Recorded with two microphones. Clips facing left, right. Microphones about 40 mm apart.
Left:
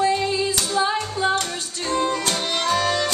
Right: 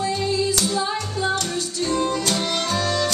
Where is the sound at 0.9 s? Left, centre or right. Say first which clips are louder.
Left 2 dB; centre.